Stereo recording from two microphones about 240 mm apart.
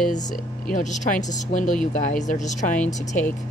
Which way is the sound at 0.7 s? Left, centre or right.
Left.